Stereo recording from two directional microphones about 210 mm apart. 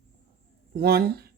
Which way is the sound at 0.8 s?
50° right (ahead or behind).